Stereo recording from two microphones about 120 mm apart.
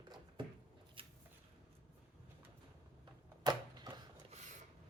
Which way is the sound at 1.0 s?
50° right (ahead or behind).